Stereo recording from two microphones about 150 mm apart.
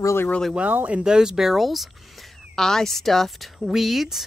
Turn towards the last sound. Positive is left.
turn(degrees=0)  # may be behind; listen again after turning